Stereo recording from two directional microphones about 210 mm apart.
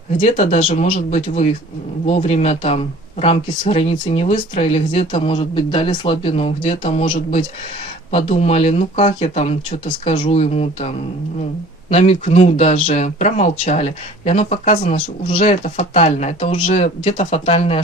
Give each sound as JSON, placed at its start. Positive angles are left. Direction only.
{"t": 0.2, "sound": "speech", "side_deg": 35}